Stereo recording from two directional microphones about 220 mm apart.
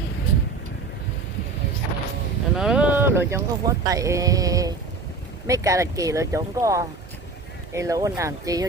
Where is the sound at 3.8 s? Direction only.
15° right (ahead or behind).